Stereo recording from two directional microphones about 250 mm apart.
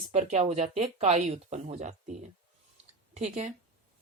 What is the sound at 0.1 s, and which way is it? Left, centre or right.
A woman's voice, right.